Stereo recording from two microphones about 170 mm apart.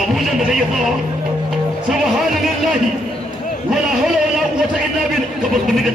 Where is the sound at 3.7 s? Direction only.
5° right (ahead or behind).